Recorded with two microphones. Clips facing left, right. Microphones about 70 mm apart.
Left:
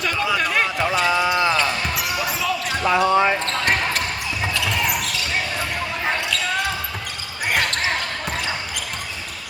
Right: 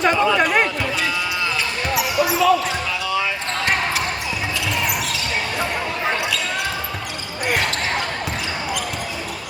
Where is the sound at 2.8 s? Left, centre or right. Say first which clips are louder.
Left 6 dB; left.